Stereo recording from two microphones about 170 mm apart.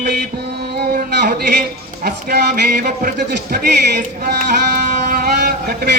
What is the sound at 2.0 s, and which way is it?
Speech, 65° right (ahead or behind).